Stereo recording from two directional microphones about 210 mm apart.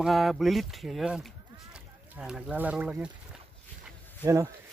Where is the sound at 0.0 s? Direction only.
Centre (ahead or behind).